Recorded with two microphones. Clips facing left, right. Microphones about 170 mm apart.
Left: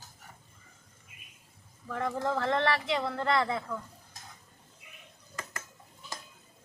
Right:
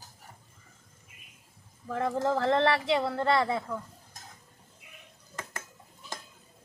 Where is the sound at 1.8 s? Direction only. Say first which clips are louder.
Right 3 dB; 30° right (ahead or behind).